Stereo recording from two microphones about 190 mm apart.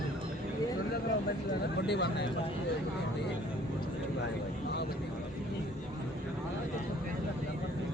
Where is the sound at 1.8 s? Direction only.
60° left (ahead or behind).